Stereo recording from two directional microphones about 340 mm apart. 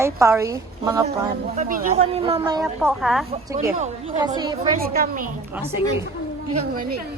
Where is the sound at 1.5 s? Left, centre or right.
Right.